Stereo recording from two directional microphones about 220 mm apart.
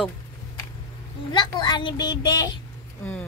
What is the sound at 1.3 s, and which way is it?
A woman's voice, 20° left (ahead or behind).